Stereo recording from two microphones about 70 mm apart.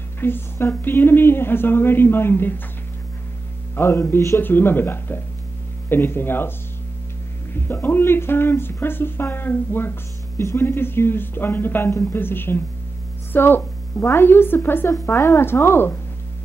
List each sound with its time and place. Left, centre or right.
0.2 s speech: left
3.7 s speech: left
4.4 s speech: left
7.6 s speech: left